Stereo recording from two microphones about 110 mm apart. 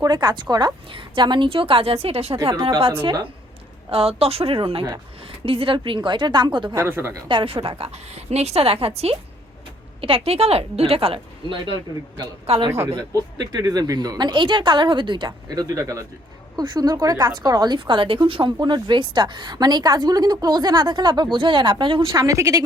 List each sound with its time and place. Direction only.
0.0 s a woman's voice: 40° right (ahead or behind); by 2.6 s 55° right (ahead or behind)
2.6 s a woman's voice: 40° right (ahead or behind)
3.8 s a woman's voice: 60° right (ahead or behind); by 6.7 s 45° right (ahead or behind)
6.7 s speech: 25° right (ahead or behind)
7.3 s a woman's voice: 50° right (ahead or behind)
10.0 s a woman's voice: 60° right (ahead or behind)
12.5 s speech: 70° right (ahead or behind)
13.0 s a woman's voice: 35° right (ahead or behind)
22.1 s speech: 30° right (ahead or behind)